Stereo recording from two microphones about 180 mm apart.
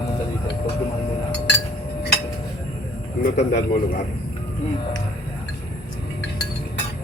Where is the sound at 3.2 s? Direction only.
50° left (ahead or behind).